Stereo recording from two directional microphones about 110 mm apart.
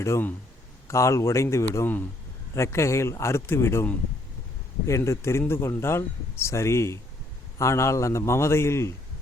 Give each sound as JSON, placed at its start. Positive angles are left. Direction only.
{"t": 0.0, "sound": "speech", "side_deg": 20}